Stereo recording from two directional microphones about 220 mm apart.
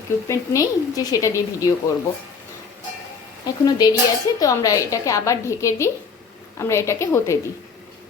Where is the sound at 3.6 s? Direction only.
15° left (ahead or behind).